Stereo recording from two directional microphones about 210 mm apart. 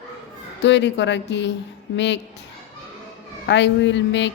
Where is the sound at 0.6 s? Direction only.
55° left (ahead or behind).